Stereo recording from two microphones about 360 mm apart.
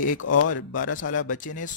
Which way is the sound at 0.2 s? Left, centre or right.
Left.